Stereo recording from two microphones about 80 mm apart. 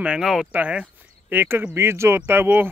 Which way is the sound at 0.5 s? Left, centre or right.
Centre.